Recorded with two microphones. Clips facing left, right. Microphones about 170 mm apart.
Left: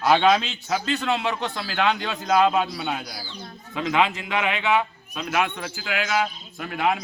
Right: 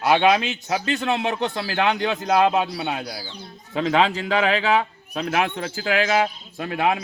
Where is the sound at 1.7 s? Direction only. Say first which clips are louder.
Right 1 dB; 20° right (ahead or behind).